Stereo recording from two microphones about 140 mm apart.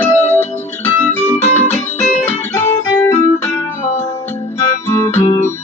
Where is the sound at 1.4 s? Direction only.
55° left (ahead or behind).